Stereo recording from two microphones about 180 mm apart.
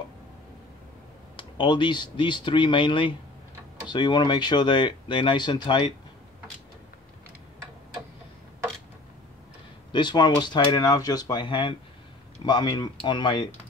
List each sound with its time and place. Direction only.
1.3 s speech: 25° left (ahead or behind)
9.9 s speech: 25° left (ahead or behind)